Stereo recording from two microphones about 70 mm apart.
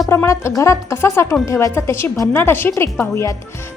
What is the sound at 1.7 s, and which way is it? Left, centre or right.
A woman's voice, left.